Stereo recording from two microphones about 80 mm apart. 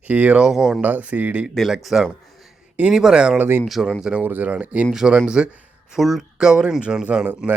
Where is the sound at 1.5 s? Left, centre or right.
Centre.